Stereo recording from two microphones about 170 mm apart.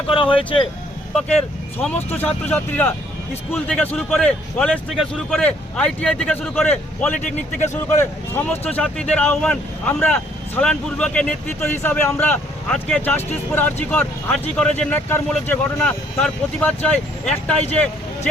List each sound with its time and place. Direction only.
0.1 s speech: 30° left (ahead or behind)
2.0 s speech: 10° left (ahead or behind)